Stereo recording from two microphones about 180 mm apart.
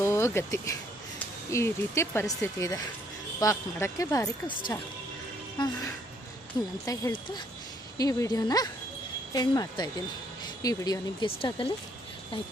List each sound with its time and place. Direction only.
0.0 s speech: 15° left (ahead or behind)
5.5 s speech: 25° left (ahead or behind)